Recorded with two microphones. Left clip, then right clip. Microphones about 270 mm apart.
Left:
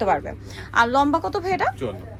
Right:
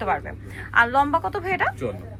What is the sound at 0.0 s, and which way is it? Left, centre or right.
A woman's voice, left.